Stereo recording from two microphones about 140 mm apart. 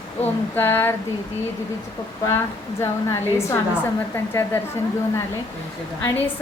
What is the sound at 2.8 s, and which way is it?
A woman's voice, 20° left (ahead or behind).